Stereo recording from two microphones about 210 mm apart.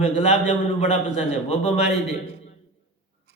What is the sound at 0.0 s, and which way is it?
A man's voice, 30° left (ahead or behind).